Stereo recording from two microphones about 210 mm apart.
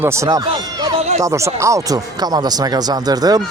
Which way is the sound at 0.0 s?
15° right (ahead or behind).